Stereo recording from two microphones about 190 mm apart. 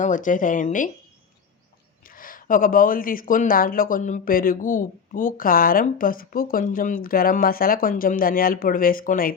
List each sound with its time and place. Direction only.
0.0 s speech: 40° left (ahead or behind)
2.0 s speech: 45° left (ahead or behind)